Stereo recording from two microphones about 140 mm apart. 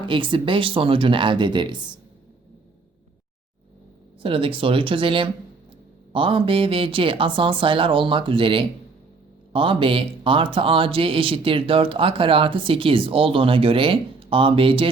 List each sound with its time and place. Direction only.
0.0 s a man's voice: 35° right (ahead or behind)
4.2 s a man's voice: 40° right (ahead or behind)